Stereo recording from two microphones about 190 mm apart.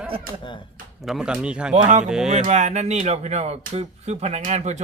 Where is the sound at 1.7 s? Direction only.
40° right (ahead or behind).